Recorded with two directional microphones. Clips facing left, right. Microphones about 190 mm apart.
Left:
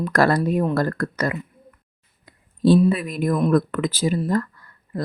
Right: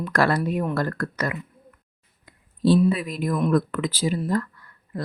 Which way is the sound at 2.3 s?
35° left (ahead or behind).